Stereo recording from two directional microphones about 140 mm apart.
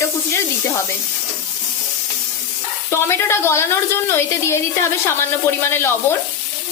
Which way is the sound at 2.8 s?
20° left (ahead or behind).